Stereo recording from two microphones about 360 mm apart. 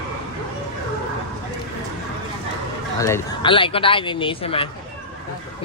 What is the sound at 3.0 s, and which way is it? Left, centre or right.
Speech, centre.